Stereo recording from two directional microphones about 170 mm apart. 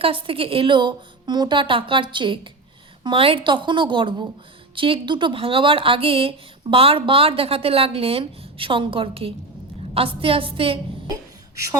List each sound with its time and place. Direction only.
0.0 s a woman's voice: 30° right (ahead or behind)